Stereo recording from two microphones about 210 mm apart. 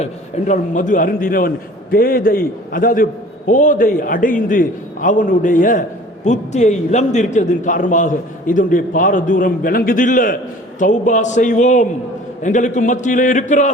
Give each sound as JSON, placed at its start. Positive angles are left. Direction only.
{"t": 0.0, "sound": "a man's voice", "side_deg": 35}